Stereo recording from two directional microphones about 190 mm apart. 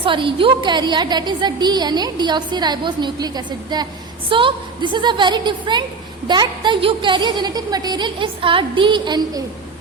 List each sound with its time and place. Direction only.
0.0 s a woman's voice: 25° right (ahead or behind)